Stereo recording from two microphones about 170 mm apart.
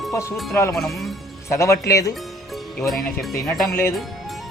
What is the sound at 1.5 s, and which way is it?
Speech, 15° left (ahead or behind).